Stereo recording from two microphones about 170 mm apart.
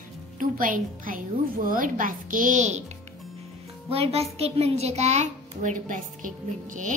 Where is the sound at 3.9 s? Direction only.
35° right (ahead or behind).